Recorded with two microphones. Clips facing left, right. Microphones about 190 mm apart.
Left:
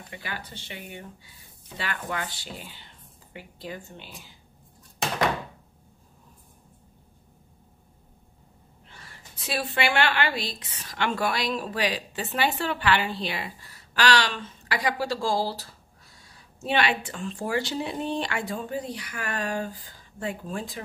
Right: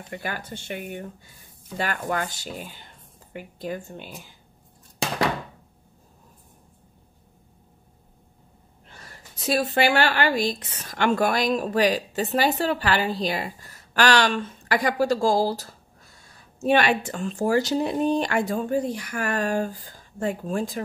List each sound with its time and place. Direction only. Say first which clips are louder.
0.1 s a woman's voice: right 6 dB; 50° right (ahead or behind)
8.8 s a woman's voice: right 3 dB; 45° right (ahead or behind)